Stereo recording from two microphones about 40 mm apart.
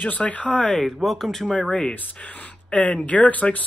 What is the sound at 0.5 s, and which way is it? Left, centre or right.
Speech, left.